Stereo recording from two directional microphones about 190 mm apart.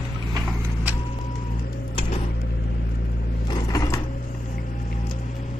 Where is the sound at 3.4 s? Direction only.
20° left (ahead or behind).